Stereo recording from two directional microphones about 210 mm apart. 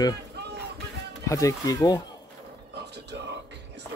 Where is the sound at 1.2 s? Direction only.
15° left (ahead or behind).